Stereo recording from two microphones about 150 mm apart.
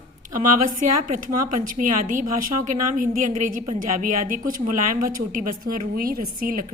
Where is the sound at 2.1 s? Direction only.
65° right (ahead or behind).